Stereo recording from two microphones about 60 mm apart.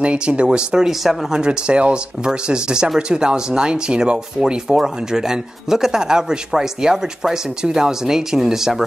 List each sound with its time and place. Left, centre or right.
0.0 s speech: centre